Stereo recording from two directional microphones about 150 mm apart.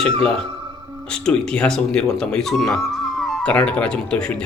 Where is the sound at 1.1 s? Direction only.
5° left (ahead or behind).